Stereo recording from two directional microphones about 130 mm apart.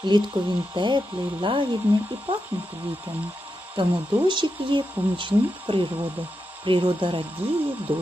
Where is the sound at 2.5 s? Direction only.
15° right (ahead or behind).